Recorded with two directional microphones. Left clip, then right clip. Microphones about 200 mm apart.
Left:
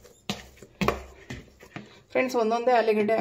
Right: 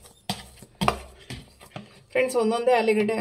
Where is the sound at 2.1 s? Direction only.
20° left (ahead or behind).